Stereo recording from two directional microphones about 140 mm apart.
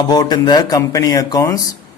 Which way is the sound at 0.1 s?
30° left (ahead or behind).